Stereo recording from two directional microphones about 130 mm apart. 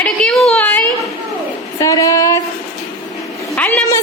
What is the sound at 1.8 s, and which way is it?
Music, 30° left (ahead or behind).